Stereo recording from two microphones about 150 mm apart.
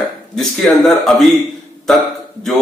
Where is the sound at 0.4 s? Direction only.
Centre (ahead or behind).